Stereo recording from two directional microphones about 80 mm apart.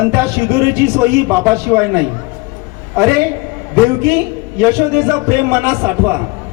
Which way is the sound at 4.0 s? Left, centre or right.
Right.